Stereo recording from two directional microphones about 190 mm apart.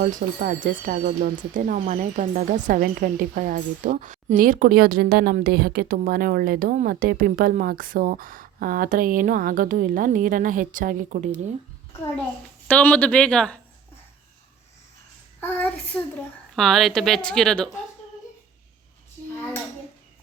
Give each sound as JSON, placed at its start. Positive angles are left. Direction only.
{"t": 0.0, "sound": "speech", "side_deg": -45}
{"t": 12.6, "sound": "speech", "side_deg": 5}
{"t": 15.4, "sound": "a woman's voice", "side_deg": 10}